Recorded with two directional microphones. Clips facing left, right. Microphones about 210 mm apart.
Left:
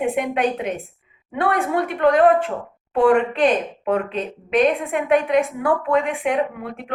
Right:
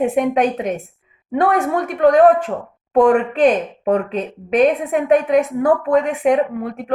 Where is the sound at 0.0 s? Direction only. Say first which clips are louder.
Right 4 dB; 40° right (ahead or behind).